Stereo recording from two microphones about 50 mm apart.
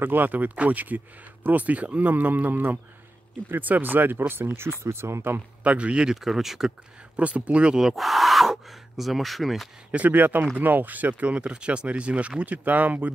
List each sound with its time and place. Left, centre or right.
0.0 s speech: right
5.6 s speech: right
6.2 s speech: centre
7.2 s speech: right
7.8 s speech: centre
9.8 s speech: right